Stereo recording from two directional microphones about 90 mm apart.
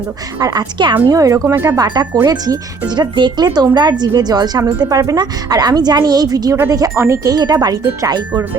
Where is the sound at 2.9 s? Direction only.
55° right (ahead or behind).